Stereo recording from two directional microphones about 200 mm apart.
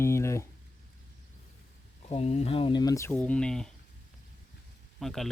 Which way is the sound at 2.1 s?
30° left (ahead or behind).